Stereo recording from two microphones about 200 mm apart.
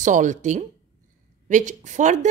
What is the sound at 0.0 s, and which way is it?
A woman's voice, 40° right (ahead or behind).